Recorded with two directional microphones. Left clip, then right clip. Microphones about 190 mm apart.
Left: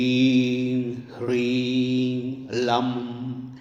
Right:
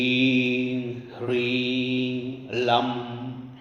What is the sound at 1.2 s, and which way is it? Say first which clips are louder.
Mantra: left 1 dB; 40° left (ahead or behind).